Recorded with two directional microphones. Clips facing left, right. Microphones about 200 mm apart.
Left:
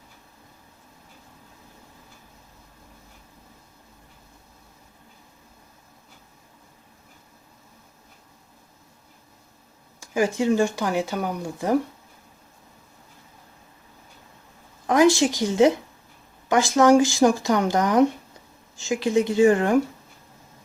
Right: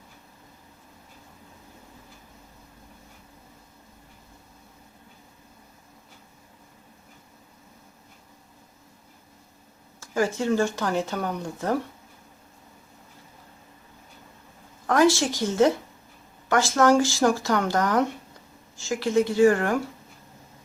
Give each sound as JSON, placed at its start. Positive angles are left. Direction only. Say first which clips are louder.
{"t": 10.0, "sound": "speech", "louder": "left 3 dB", "side_deg": 15}
{"t": 14.8, "sound": "speech", "louder": "left 3 dB", "side_deg": 15}